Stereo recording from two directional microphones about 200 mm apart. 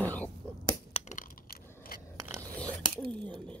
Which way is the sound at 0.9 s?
40° left (ahead or behind).